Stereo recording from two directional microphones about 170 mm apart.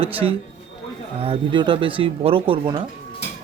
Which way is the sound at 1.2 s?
30° right (ahead or behind).